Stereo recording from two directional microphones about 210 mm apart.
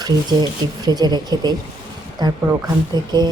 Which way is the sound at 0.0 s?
20° right (ahead or behind).